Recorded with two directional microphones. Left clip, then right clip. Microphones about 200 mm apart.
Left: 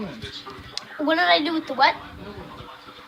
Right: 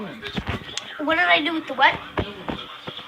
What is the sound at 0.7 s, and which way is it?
A woman's voice, 20° left (ahead or behind).